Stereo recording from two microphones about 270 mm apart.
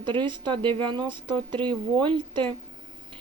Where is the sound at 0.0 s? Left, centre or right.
Centre.